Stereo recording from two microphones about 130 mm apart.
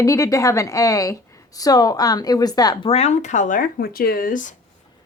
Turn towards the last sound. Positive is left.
turn(degrees=85)